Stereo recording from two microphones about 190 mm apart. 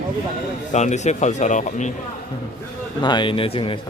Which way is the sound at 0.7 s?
40° left (ahead or behind).